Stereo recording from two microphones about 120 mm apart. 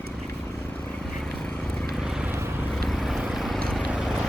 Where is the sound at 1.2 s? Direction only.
5° left (ahead or behind).